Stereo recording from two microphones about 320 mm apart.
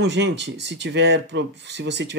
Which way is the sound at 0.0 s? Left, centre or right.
Right.